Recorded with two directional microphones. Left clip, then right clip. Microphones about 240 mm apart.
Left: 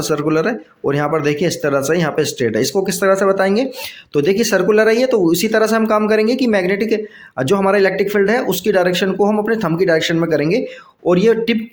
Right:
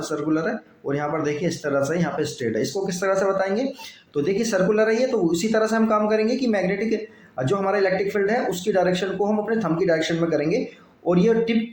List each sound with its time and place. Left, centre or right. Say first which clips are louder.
0.1 s speech: left 8 dB; left